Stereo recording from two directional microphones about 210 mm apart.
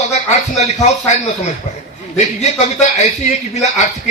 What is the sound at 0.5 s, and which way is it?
Speech, 30° left (ahead or behind).